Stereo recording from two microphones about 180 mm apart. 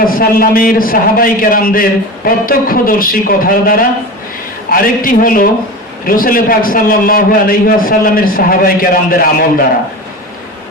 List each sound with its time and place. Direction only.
0.0 s a man's voice: 50° left (ahead or behind)